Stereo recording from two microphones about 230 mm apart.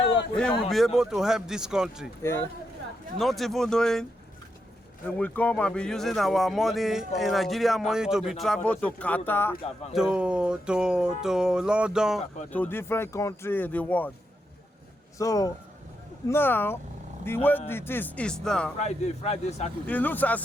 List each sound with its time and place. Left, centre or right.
0.3 s speech: centre
2.2 s speech: centre
5.0 s speech: centre
9.9 s speech: centre
12.5 s speech: centre
15.2 s speech: centre
18.8 s a man's voice: left
19.9 s speech: centre